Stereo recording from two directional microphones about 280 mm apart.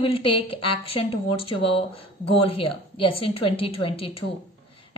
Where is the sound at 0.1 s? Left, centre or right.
Centre.